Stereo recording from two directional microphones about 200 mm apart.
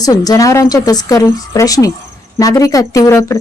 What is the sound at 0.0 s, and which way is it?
A woman's voice, 20° left (ahead or behind).